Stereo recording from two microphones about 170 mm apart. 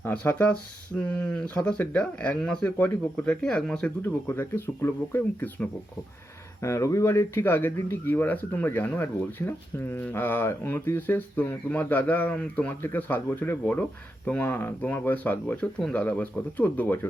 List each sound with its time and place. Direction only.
0.0 s speech: 10° left (ahead or behind)